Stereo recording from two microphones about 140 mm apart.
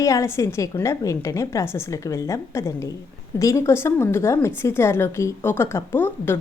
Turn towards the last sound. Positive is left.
turn(degrees=15)  # may be behind; listen again after turning